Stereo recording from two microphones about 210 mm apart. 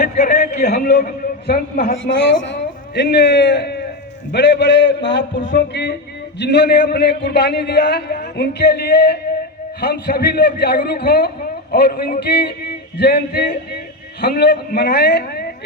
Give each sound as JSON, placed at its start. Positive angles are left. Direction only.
{"t": 0.3, "sound": "a man's voice", "side_deg": 50}